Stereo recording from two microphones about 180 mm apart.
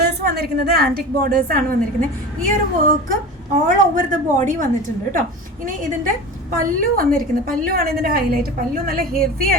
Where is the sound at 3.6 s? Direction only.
45° right (ahead or behind).